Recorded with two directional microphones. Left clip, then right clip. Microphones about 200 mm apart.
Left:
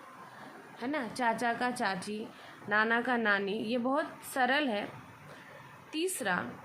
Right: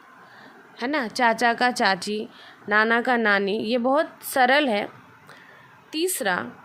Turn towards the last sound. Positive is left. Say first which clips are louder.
# right 8 dB
turn(degrees=-40)  # may be behind; listen again after turning